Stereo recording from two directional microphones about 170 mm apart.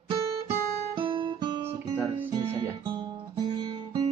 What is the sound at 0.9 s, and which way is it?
Guitar, 30° right (ahead or behind).